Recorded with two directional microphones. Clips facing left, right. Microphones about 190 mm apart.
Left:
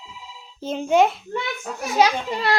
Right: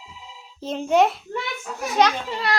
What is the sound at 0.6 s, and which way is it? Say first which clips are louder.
A child's voice: left 1 dB; centre (ahead or behind).